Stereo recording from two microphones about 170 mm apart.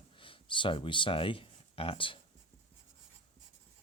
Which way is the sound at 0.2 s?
30° left (ahead or behind).